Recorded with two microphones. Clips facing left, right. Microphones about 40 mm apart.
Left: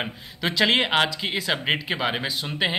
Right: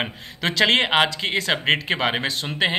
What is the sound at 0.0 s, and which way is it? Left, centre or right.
Speech, right.